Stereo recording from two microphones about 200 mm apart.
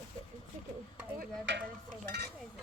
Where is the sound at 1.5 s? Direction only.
65° right (ahead or behind).